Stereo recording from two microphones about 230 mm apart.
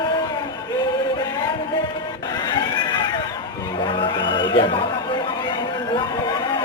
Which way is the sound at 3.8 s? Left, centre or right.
Left.